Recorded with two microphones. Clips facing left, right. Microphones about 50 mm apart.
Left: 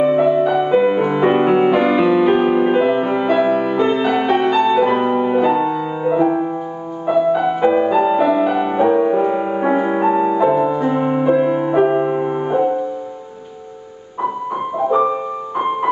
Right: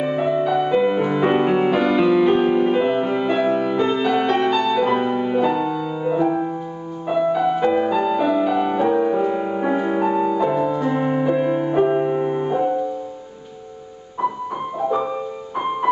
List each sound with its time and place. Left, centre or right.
0.0 s music: centre
14.8 s music: centre